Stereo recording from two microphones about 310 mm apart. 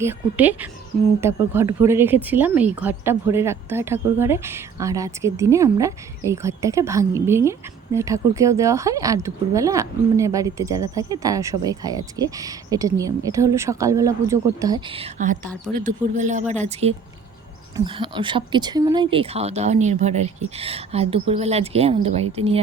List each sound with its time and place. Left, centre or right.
0.0 s a woman's voice: centre